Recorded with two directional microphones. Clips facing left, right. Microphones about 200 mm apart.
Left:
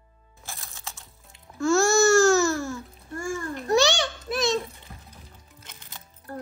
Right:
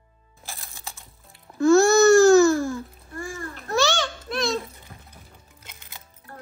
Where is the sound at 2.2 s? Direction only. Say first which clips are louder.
Right 5 dB; centre (ahead or behind).